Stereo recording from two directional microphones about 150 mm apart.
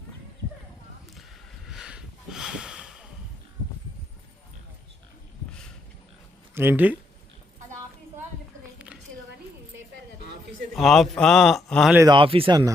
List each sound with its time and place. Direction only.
1.6 s snort: 5° right (ahead or behind)
6.5 s speech: 15° right (ahead or behind)
10.8 s a man's voice: centre (ahead or behind)
12.0 s speech: 35° right (ahead or behind)